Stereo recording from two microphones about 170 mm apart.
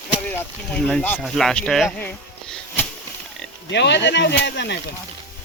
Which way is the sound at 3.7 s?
90° left.